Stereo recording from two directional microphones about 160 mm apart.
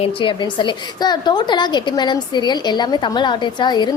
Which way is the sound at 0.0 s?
30° left (ahead or behind).